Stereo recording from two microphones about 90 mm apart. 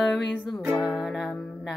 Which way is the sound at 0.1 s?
15° left (ahead or behind).